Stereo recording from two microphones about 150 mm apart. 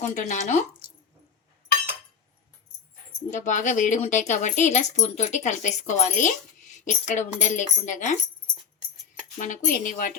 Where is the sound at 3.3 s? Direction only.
55° left (ahead or behind).